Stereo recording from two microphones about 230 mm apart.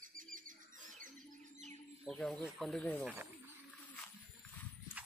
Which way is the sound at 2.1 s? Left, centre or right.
Centre.